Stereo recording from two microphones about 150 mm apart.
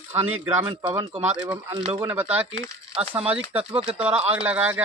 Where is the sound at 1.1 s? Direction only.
45° right (ahead or behind).